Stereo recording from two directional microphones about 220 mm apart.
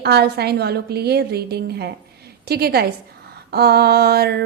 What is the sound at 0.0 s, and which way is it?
A woman's voice, 45° right (ahead or behind).